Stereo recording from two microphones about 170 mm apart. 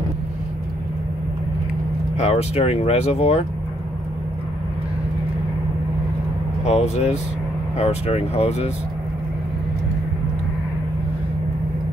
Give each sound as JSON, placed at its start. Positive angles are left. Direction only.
{"t": 2.1, "sound": "speech", "side_deg": 40}
{"t": 6.6, "sound": "speech", "side_deg": 40}